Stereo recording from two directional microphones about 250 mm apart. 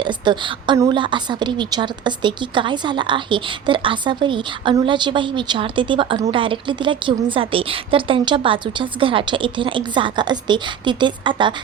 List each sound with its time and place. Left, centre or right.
0.0 s a woman's voice: centre